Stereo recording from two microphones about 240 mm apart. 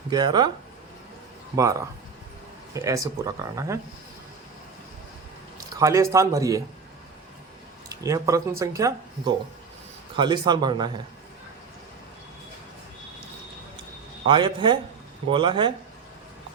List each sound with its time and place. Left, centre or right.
0.1 s speech: centre
1.5 s speech: centre
5.7 s speech: centre
7.9 s speech: centre
14.3 s a man's voice: centre